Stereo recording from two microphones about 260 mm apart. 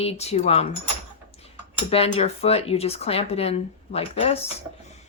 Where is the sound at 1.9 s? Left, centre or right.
Left.